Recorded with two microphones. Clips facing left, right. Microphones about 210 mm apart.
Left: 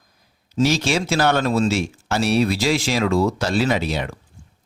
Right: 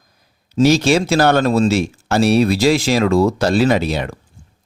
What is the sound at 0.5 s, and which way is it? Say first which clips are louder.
Speech: right 6 dB; 40° right (ahead or behind).